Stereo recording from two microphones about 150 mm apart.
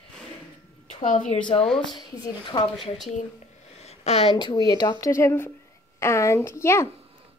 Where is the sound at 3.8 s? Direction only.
45° left (ahead or behind).